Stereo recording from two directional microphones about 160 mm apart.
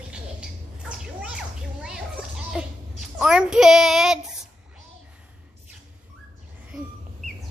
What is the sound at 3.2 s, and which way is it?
Child singing, 5° right (ahead or behind).